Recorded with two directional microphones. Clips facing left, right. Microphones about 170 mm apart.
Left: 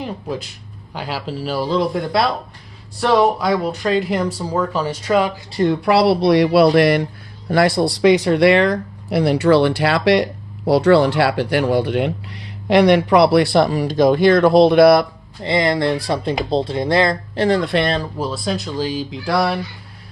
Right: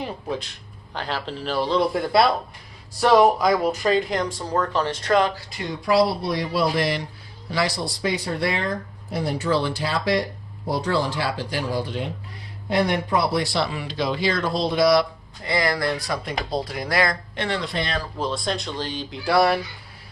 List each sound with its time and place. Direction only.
0.0 s speech: 5° left (ahead or behind)
5.6 s speech: 65° left (ahead or behind)
15.4 s speech: 25° left (ahead or behind)
17.6 s speech: 60° left (ahead or behind)
18.2 s speech: 5° left (ahead or behind)